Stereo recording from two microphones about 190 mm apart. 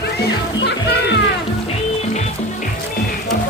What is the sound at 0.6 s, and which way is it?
Music, 60° left (ahead or behind).